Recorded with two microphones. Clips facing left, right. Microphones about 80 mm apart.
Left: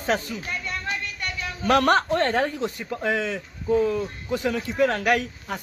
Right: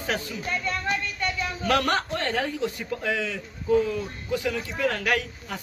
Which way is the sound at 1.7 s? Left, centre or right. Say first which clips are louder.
Left 5 dB; left.